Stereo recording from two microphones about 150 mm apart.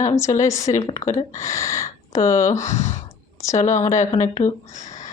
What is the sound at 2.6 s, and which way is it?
Speech, 50° left (ahead or behind).